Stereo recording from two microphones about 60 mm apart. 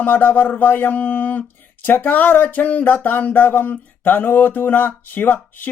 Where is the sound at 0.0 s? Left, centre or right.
Left.